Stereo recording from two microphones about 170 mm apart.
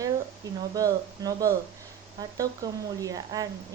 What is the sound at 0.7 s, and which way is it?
Speech, 20° right (ahead or behind).